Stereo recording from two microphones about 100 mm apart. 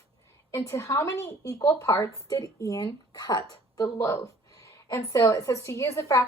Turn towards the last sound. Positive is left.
turn(degrees=30)  # may be behind; listen again after turning